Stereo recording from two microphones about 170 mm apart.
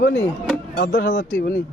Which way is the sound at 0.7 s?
65° left (ahead or behind).